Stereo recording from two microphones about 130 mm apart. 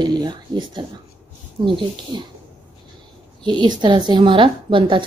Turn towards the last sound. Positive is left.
turn(degrees=-40)  # may be behind; listen again after turning